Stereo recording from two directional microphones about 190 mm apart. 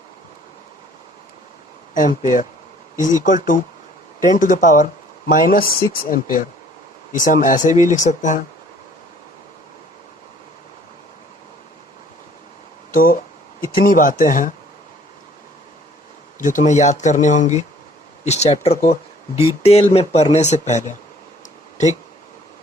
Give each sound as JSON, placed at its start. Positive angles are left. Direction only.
{"t": 1.9, "sound": "speech", "side_deg": 45}
{"t": 12.9, "sound": "speech", "side_deg": 50}
{"t": 16.4, "sound": "speech", "side_deg": 40}